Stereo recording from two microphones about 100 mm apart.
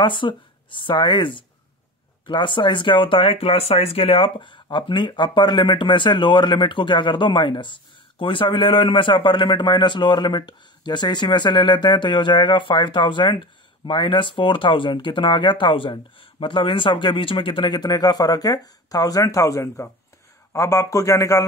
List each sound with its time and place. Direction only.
0.0 s a man's voice: 55° left (ahead or behind); by 21.5 s 35° left (ahead or behind)